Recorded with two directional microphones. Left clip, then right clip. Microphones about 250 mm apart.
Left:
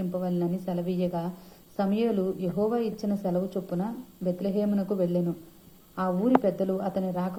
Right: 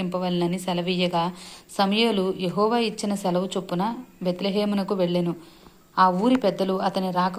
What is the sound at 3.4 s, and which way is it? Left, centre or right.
Speech, centre.